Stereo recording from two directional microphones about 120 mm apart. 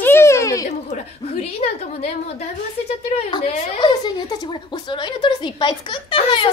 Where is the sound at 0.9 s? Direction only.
60° left (ahead or behind).